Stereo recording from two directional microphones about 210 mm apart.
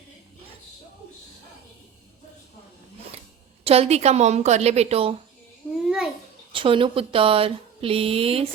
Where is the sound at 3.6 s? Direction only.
30° right (ahead or behind).